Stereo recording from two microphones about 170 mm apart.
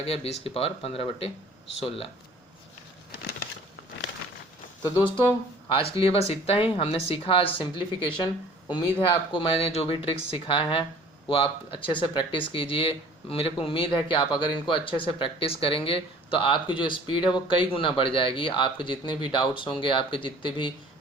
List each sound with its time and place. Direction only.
0.0 s speech: 35° left (ahead or behind)
4.8 s speech: 25° left (ahead or behind)